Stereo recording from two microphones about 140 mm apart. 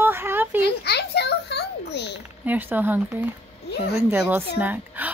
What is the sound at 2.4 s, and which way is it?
A woman's voice, 10° right (ahead or behind).